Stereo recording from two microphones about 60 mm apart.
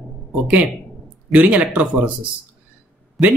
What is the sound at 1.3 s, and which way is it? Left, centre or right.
Speech, right.